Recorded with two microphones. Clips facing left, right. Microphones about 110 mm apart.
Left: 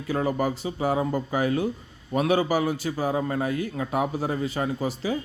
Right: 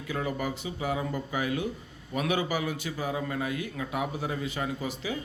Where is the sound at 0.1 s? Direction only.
35° left (ahead or behind).